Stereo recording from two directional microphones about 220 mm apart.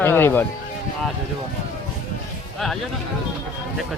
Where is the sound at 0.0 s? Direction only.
10° left (ahead or behind).